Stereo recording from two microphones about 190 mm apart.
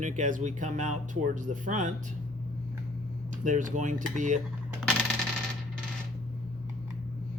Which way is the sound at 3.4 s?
40° right (ahead or behind).